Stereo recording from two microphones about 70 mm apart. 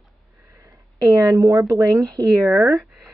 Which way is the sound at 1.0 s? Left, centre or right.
Right.